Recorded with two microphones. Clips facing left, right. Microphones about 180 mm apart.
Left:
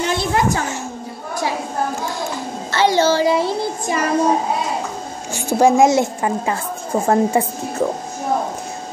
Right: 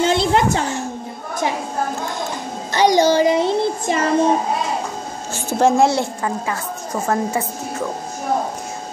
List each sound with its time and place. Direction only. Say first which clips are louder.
0.0 s a sound: right 3 dB; 25° right (ahead or behind)
2.7 s child singing: right 1 dB; 15° right (ahead or behind)
5.3 s a woman's voice: left 2 dB; 10° left (ahead or behind); by 7.9 s 30° left (ahead or behind)